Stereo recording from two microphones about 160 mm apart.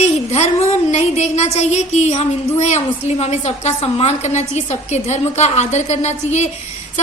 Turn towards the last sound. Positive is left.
turn(degrees=45)  # may be behind; listen again after turning